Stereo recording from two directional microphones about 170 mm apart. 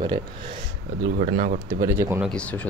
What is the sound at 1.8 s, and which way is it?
Speech, 15° right (ahead or behind).